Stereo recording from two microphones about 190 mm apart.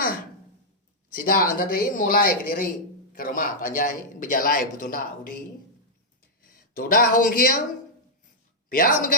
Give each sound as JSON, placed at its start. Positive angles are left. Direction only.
{"t": 1.1, "sound": "a man's voice", "side_deg": 50}
{"t": 6.7, "sound": "a man's voice", "side_deg": 50}
{"t": 8.7, "sound": "a man's voice", "side_deg": 45}